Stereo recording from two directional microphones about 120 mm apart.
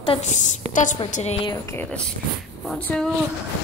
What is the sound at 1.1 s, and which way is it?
Speech, 65° left (ahead or behind).